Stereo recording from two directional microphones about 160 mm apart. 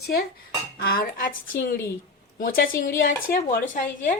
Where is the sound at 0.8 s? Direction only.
70° left (ahead or behind).